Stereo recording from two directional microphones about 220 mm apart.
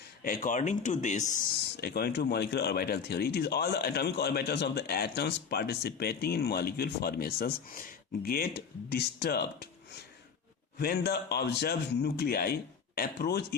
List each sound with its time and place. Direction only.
0.2 s speech: 40° left (ahead or behind)
1.7 s speech: 45° left (ahead or behind)
10.8 s speech: 45° left (ahead or behind)